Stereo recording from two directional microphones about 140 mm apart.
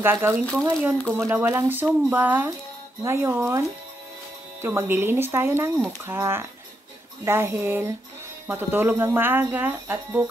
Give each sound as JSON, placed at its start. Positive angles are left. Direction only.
{"t": 0.0, "sound": "speech", "side_deg": -15}